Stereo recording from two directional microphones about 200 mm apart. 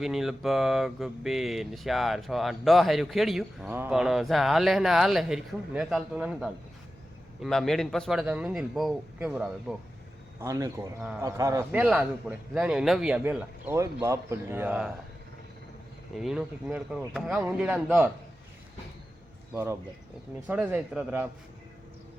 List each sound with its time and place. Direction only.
0.0 s speech: centre (ahead or behind)
10.4 s speech: 15° right (ahead or behind)
11.0 s speech: 5° right (ahead or behind)
11.3 s speech: 15° right (ahead or behind)
16.1 s speech: centre (ahead or behind)
19.5 s speech: 15° right (ahead or behind)